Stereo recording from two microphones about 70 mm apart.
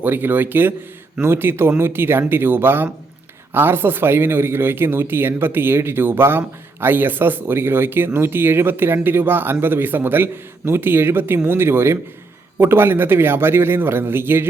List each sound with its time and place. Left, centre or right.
0.0 s speech: right